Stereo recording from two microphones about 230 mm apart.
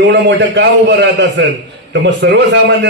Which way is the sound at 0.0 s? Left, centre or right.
Right.